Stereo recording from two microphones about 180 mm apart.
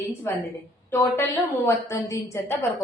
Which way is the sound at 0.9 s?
15° left (ahead or behind).